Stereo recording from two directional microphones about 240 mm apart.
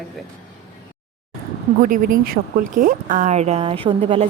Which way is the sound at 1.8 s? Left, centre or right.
Right.